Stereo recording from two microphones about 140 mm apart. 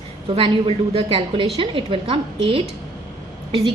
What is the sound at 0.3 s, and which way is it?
A woman's voice, 40° right (ahead or behind).